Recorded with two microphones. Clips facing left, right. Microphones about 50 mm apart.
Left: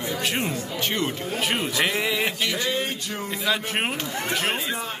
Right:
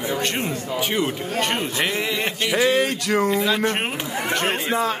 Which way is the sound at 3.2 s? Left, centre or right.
Centre.